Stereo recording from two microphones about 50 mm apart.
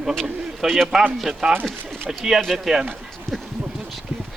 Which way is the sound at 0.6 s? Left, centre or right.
Centre.